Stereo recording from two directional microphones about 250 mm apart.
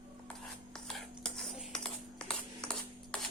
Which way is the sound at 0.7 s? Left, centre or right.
Centre.